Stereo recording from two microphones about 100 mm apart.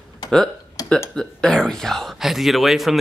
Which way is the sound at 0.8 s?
35° left (ahead or behind).